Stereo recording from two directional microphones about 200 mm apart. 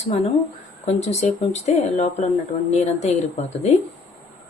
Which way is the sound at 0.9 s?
35° left (ahead or behind).